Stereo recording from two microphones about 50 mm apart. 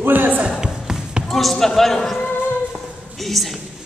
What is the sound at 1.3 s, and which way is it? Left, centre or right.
Speech, centre.